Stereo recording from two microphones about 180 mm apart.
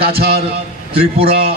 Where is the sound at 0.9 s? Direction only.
30° right (ahead or behind).